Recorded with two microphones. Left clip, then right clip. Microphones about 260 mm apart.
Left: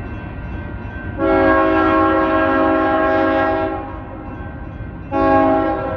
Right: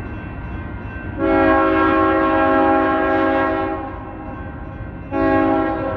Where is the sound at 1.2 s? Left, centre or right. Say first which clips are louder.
Left 1 dB; centre.